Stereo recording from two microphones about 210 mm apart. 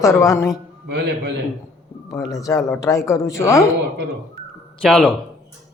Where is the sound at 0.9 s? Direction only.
55° right (ahead or behind).